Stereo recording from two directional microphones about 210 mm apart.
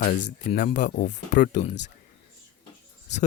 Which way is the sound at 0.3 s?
40° left (ahead or behind).